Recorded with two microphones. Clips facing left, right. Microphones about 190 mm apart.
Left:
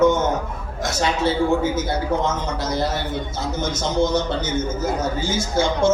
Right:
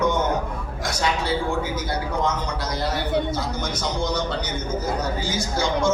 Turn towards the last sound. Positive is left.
turn(degrees=25)  # may be behind; listen again after turning